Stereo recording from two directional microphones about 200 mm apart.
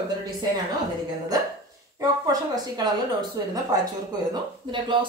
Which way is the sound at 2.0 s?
20° right (ahead or behind).